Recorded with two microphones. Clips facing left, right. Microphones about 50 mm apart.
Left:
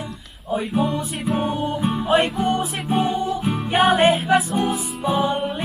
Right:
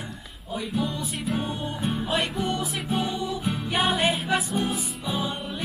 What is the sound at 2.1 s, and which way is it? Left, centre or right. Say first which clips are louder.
Music: left 10 dB; left.